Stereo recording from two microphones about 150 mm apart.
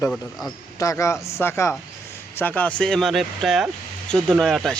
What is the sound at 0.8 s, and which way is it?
A man's voice, 20° left (ahead or behind).